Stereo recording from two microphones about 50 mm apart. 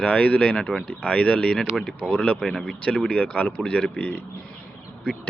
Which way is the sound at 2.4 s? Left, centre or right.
Centre.